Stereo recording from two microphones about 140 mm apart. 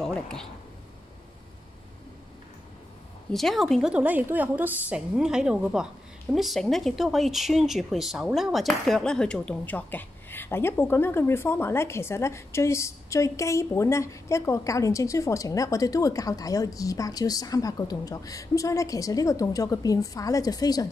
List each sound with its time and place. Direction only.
0.0 s a sound: 5° left (ahead or behind)
3.3 s speech: centre (ahead or behind)
3.9 s a woman's voice: 10° right (ahead or behind); by 20.9 s 25° left (ahead or behind)